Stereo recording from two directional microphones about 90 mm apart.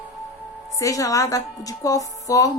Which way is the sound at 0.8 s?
40° left (ahead or behind).